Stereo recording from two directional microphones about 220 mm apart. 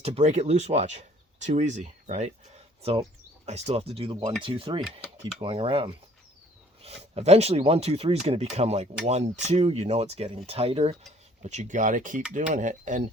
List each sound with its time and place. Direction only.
0.0 s speech: 30° right (ahead or behind)